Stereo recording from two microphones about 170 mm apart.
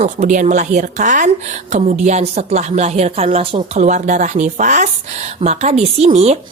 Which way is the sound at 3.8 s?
45° right (ahead or behind).